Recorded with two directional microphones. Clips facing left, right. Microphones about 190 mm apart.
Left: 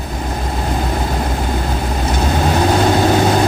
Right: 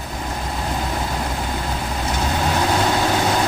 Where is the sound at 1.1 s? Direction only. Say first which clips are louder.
Left 5 dB; 40° left (ahead or behind).